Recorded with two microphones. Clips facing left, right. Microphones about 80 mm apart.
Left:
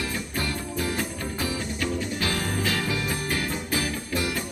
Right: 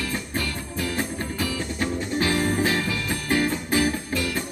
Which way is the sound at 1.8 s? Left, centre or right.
Right.